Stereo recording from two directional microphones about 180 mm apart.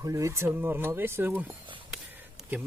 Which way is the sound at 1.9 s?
10° right (ahead or behind).